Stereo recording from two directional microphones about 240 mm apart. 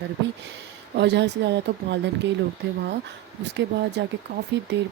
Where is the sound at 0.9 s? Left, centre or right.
Right.